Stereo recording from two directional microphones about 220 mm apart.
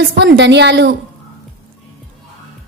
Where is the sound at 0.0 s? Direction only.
50° right (ahead or behind).